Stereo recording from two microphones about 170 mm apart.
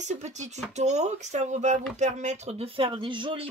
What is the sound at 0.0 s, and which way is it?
Speech, 45° right (ahead or behind).